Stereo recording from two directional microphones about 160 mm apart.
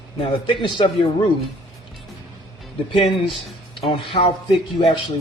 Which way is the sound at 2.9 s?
35° left (ahead or behind).